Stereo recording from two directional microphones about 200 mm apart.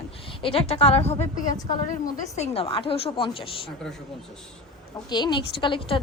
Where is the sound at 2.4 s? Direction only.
30° left (ahead or behind).